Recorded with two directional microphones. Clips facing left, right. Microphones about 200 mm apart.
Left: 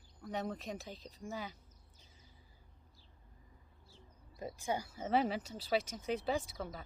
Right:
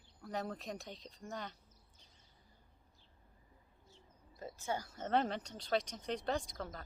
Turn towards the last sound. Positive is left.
turn(degrees=5)  # may be behind; listen again after turning